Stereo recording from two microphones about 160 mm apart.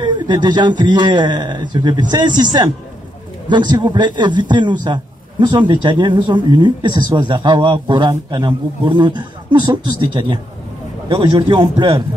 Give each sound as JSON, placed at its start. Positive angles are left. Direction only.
{"t": 0.0, "sound": "speech", "side_deg": -30}